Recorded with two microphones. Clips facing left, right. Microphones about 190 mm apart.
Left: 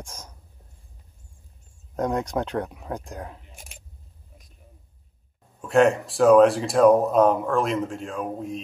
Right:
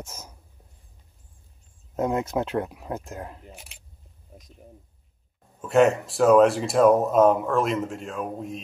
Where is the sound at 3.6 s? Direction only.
45° left (ahead or behind).